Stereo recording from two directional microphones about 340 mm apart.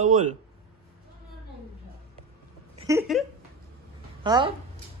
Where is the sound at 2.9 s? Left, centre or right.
Centre.